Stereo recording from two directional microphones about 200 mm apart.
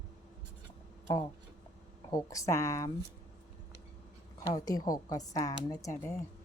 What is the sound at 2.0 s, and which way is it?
Speech, 15° left (ahead or behind).